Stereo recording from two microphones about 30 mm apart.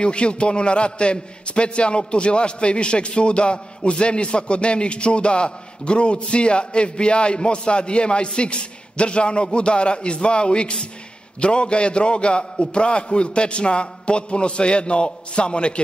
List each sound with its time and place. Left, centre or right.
0.0 s a man's voice: left